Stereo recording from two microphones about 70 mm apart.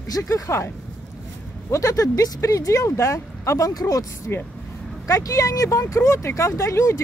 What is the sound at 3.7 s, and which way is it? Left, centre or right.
Speech, left.